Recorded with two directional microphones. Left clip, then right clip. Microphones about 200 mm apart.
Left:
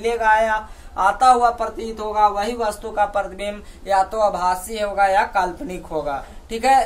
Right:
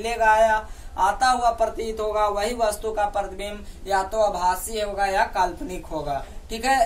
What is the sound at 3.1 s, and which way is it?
Speech, 35° left (ahead or behind).